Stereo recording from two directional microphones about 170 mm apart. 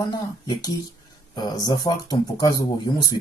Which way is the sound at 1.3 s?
25° left (ahead or behind).